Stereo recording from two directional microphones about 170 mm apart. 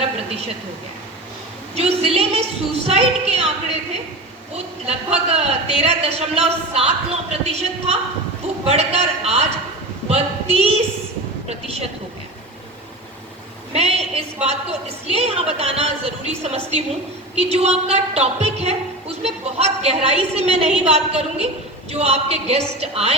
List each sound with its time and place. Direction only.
1.7 s a woman's voice: 35° right (ahead or behind)
13.7 s a woman's voice: 40° right (ahead or behind)